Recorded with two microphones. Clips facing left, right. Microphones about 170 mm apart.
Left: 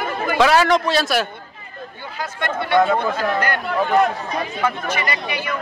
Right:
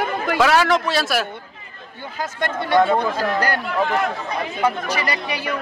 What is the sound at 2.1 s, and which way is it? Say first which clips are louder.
Speech: even; 45° right (ahead or behind).